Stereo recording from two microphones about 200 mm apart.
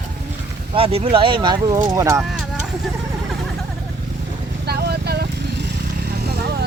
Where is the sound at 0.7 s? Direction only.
30° right (ahead or behind).